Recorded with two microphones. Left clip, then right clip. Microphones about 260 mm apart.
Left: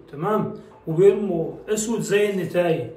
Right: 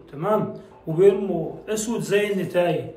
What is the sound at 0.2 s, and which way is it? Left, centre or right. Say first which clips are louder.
A man's voice: right 1 dB; centre.